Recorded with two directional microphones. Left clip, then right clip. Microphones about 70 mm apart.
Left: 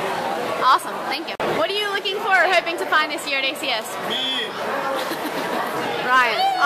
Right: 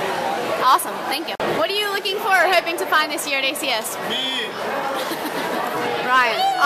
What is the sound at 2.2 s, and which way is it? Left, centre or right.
A woman's voice, right.